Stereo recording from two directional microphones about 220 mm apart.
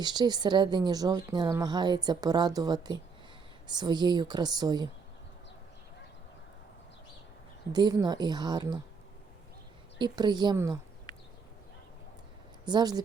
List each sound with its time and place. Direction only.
0.0 s speech: 20° right (ahead or behind)
7.7 s speech: 20° right (ahead or behind)
10.0 s speech: 20° right (ahead or behind)
12.6 s speech: 20° right (ahead or behind)